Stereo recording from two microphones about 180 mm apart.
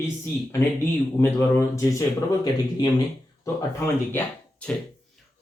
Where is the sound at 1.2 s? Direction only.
15° left (ahead or behind).